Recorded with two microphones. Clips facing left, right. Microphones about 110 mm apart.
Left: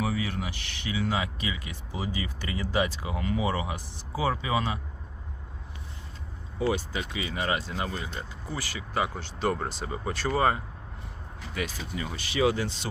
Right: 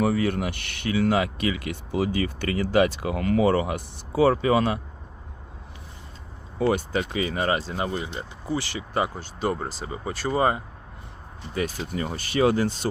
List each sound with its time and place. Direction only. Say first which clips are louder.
0.0 s speech: right 7 dB; 55° right (ahead or behind)
6.6 s speech: right 5 dB; 55° right (ahead or behind); by 8.1 s 30° right (ahead or behind)
9.1 s speech: right 1 dB; 10° right (ahead or behind)
10.2 s speech: right 2 dB; 20° right (ahead or behind)
11.5 s speech: right 6 dB; 45° right (ahead or behind)